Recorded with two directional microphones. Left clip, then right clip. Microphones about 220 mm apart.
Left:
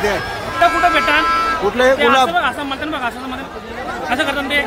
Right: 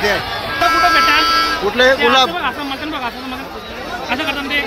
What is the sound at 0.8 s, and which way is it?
Speech, 5° left (ahead or behind).